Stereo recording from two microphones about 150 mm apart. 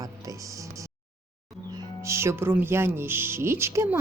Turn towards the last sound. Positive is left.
turn(degrees=-20)  # may be behind; listen again after turning